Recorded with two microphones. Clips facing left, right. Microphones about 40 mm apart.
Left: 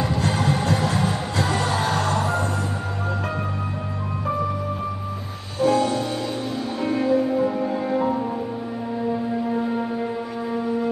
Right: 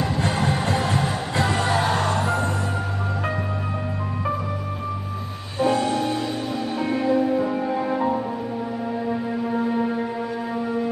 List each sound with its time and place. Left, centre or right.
0.4 s music: right
5.6 s music: right
7.3 s music: centre